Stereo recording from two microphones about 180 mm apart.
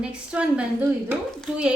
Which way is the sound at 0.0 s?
5° right (ahead or behind).